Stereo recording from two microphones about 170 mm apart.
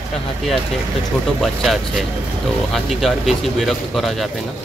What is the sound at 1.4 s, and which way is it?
Speech, centre (ahead or behind).